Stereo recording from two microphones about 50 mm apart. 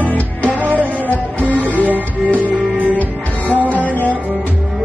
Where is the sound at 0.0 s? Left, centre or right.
Left.